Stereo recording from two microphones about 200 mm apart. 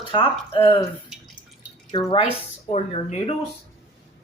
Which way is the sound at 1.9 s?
25° left (ahead or behind).